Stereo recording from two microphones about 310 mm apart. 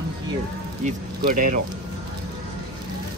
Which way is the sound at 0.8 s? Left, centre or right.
Right.